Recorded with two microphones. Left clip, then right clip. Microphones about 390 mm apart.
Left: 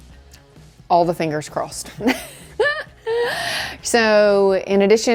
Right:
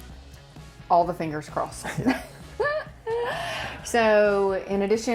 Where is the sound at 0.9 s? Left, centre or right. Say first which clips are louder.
Left 5 dB; left.